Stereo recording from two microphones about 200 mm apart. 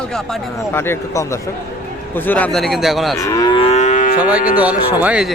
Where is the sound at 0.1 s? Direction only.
5° left (ahead or behind).